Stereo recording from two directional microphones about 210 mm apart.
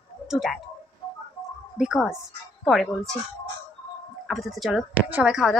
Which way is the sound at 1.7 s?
5° right (ahead or behind).